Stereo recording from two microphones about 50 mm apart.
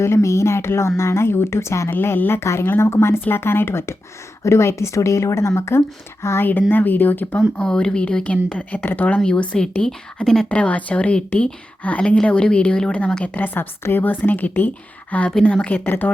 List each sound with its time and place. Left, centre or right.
0.0 s speech: left
1.9 s speech: left
2.4 s speech: left
4.4 s speech: left
6.4 s speech: left
7.6 s a woman's voice: centre
8.8 s speech: left
9.2 s a woman's voice: left
10.5 s a woman's voice: left
15.7 s speech: left